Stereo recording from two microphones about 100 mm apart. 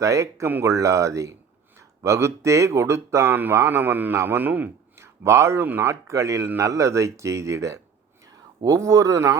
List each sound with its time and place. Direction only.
0.0 s speech: 30° right (ahead or behind)